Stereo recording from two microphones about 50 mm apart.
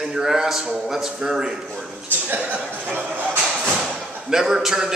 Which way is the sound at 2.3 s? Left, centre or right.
Right.